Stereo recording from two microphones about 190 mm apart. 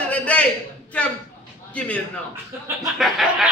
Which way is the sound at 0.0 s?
5° left (ahead or behind).